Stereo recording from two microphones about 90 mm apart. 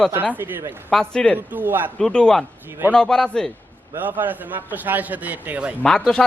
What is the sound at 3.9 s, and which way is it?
A man's voice, 20° right (ahead or behind).